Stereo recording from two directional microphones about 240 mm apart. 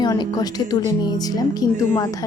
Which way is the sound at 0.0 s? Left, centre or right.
Centre.